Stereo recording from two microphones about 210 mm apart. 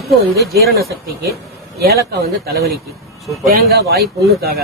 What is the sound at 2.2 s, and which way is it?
Speech, 50° right (ahead or behind).